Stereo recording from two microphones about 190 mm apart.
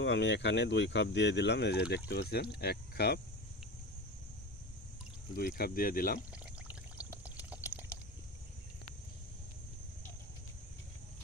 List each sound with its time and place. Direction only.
0.0 s speech: 70° left (ahead or behind)
5.3 s speech: 55° left (ahead or behind)
7.5 s a sound: 10° right (ahead or behind)